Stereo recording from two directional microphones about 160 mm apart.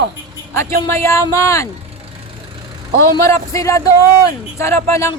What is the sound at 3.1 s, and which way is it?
Speech, 20° left (ahead or behind).